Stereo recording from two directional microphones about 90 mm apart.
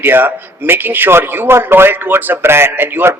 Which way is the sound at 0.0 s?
25° right (ahead or behind).